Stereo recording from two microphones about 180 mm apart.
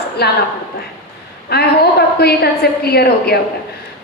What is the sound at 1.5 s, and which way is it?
A woman's voice, 60° left (ahead or behind).